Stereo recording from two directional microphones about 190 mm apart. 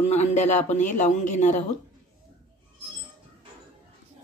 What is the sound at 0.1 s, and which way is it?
A man's voice, 35° left (ahead or behind).